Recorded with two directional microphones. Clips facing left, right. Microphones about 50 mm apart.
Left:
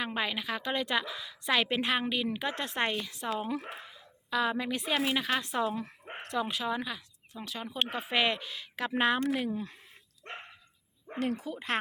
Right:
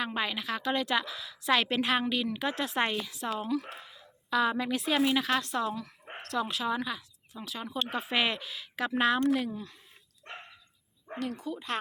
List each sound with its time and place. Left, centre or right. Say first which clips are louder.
0.0 s a woman's voice: right 1 dB; centre
3.4 s speech: right 3 dB; left
3.8 s a woman's voice: right 3 dB; centre
9.0 s a woman's voice: right 2 dB; centre
11.4 s speech: left 1 dB; left